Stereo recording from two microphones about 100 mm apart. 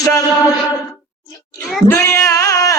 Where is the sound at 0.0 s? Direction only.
35° left (ahead or behind).